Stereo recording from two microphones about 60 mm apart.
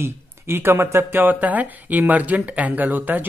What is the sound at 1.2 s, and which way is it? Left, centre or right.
Speech, right.